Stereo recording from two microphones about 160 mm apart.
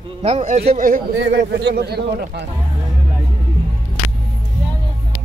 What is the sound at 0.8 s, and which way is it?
Speech, 75° right (ahead or behind).